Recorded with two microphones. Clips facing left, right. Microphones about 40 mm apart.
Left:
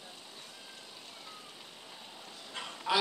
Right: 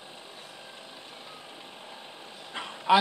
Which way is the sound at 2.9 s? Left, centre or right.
Right.